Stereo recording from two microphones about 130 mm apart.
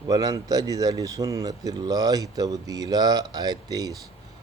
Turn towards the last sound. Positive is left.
turn(degrees=-30)  # may be behind; listen again after turning